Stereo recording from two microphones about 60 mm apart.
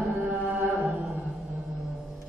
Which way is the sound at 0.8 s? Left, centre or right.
Centre.